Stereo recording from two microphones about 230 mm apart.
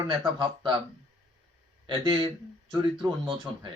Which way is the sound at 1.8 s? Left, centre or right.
Right.